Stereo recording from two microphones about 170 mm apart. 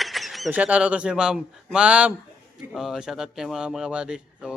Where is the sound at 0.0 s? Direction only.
Centre (ahead or behind).